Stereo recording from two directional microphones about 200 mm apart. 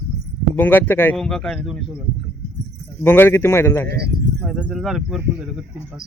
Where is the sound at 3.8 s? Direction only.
55° right (ahead or behind).